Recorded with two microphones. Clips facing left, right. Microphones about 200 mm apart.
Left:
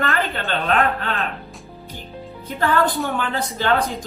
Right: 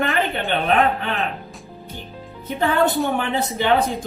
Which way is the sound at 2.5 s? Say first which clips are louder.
Right 1 dB; 20° right (ahead or behind).